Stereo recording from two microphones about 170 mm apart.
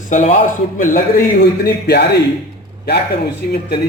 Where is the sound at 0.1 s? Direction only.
45° left (ahead or behind).